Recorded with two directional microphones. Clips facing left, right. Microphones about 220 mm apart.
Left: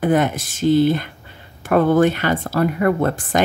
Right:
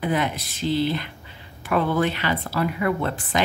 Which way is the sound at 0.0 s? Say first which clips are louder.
Left 7 dB; 50° left (ahead or behind).